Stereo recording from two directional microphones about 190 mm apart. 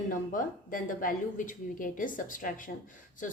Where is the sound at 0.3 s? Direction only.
45° left (ahead or behind).